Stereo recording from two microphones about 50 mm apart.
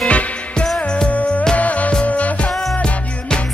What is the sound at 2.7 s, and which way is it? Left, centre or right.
Music, left.